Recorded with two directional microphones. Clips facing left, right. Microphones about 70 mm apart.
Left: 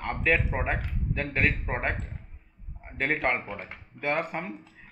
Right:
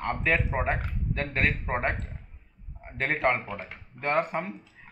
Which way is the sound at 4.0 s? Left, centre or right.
Right.